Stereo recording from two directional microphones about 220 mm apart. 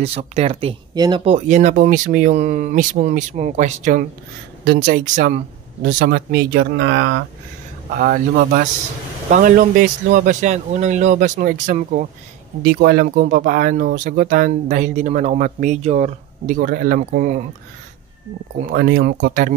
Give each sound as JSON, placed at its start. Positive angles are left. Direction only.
{"t": 0.0, "sound": "speech", "side_deg": -30}
{"t": 8.0, "sound": "speech", "side_deg": -40}
{"t": 18.7, "sound": "speech", "side_deg": -45}